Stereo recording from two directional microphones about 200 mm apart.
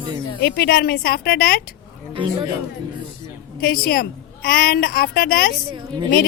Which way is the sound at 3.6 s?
50° left (ahead or behind).